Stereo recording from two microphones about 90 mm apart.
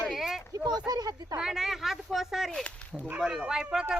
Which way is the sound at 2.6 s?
15° left (ahead or behind).